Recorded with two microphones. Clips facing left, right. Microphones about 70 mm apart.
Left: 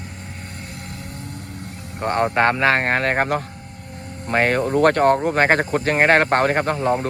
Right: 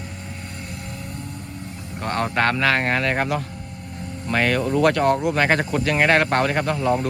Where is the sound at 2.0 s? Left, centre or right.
Left.